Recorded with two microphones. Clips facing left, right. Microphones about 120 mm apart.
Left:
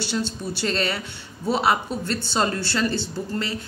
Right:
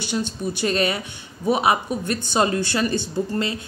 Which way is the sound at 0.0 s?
15° right (ahead or behind).